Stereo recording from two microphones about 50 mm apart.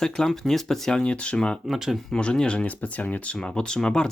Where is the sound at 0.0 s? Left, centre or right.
Centre.